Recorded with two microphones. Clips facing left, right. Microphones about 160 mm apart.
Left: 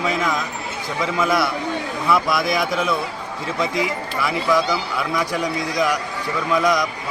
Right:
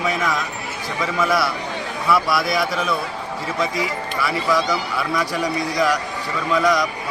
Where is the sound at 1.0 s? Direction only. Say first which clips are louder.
Even; 20° left (ahead or behind).